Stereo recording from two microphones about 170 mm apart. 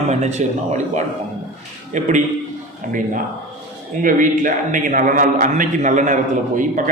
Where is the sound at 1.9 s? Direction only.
45° right (ahead or behind).